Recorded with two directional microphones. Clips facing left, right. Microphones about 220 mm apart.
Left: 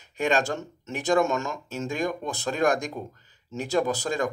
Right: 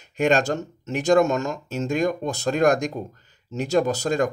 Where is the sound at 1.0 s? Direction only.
40° right (ahead or behind).